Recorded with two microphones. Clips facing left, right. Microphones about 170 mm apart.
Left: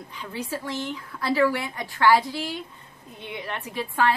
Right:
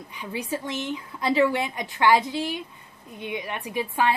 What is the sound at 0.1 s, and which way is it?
A woman's voice, 15° right (ahead or behind).